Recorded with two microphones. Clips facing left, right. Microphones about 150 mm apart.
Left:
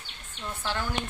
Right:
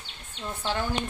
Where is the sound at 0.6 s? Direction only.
20° right (ahead or behind).